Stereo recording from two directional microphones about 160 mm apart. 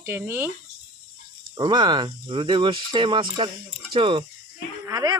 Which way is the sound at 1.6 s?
30° right (ahead or behind).